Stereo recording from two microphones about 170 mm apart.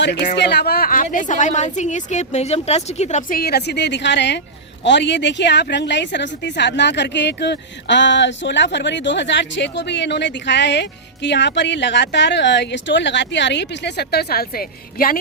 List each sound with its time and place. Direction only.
0.0 s speech: 90° left; by 1.0 s 60° left (ahead or behind)
1.1 s a woman's voice: 50° left (ahead or behind)